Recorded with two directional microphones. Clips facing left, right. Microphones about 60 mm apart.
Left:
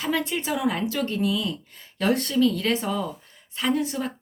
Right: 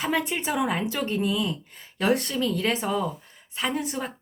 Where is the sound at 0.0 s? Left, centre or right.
Right.